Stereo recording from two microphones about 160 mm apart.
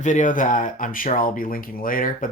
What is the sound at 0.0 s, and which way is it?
Speech, 50° left (ahead or behind).